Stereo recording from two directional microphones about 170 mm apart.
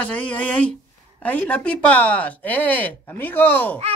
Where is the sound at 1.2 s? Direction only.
10° left (ahead or behind).